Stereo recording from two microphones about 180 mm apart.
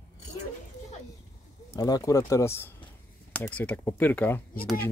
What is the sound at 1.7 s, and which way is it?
Speech, 20° left (ahead or behind).